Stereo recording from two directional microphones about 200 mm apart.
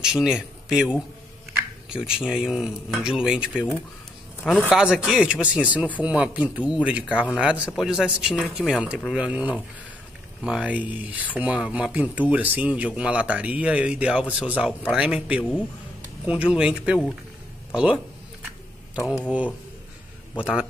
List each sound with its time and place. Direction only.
0.0 s a man's voice: 5° right (ahead or behind)
20.3 s a man's voice: 5° right (ahead or behind)